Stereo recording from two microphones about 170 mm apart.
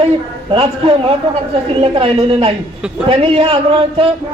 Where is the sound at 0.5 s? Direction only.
35° right (ahead or behind).